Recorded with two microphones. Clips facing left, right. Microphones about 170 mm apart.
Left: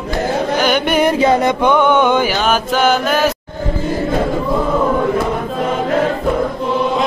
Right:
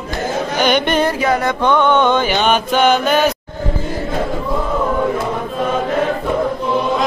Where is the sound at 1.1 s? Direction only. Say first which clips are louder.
Left 4 dB; 25° left (ahead or behind); by 3.3 s centre (ahead or behind).